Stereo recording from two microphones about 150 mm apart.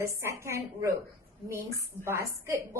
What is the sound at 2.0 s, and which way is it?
Music, 20° right (ahead or behind).